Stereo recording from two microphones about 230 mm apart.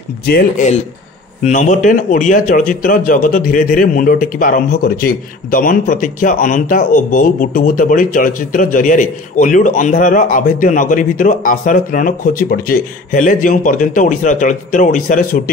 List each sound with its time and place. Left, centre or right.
0.3 s a man's voice: left